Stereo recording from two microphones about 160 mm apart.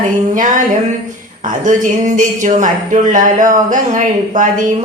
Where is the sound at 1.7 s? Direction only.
55° right (ahead or behind).